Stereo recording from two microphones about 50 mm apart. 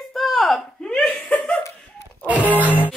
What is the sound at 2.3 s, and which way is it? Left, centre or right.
Music, right.